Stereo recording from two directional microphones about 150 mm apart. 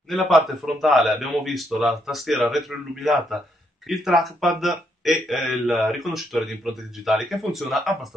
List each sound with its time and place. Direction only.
0.1 s speech: centre (ahead or behind)